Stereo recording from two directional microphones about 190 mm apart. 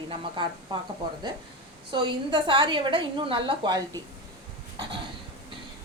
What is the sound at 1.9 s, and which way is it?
A woman's voice, 25° right (ahead or behind).